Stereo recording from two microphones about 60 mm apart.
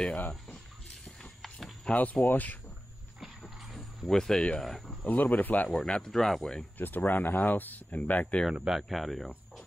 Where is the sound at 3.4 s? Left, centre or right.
Centre.